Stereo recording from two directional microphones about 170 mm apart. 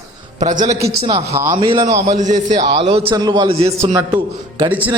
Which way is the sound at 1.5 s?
30° right (ahead or behind).